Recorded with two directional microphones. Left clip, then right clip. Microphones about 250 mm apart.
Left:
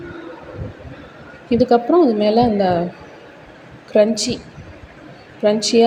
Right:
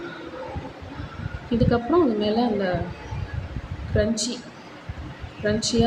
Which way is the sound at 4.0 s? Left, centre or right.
Left.